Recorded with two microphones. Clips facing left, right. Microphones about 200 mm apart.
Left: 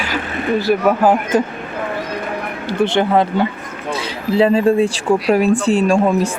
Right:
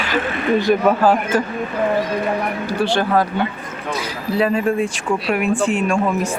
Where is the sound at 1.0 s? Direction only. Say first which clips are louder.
Left 2 dB; 20° left (ahead or behind).